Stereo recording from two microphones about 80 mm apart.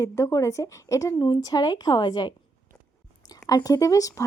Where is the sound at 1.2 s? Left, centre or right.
Left.